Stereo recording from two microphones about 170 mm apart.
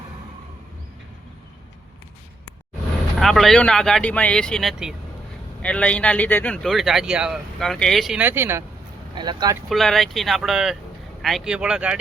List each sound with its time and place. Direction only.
3.2 s speech: centre (ahead or behind)
9.1 s speech: 25° right (ahead or behind)
9.6 s speech: centre (ahead or behind)